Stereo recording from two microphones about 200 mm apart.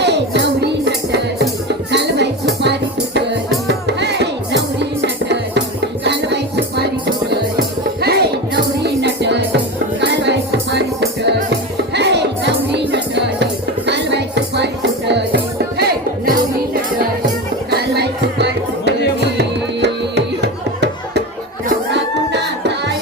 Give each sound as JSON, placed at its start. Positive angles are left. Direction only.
{"t": 0.0, "sound": "music", "side_deg": -60}
{"t": 8.0, "sound": "music", "side_deg": -55}
{"t": 15.8, "sound": "music", "side_deg": -45}
{"t": 17.7, "sound": "music", "side_deg": -55}
{"t": 21.9, "sound": "a sound", "side_deg": -60}